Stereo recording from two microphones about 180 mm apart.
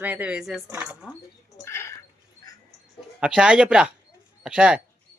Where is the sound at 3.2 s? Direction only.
5° right (ahead or behind).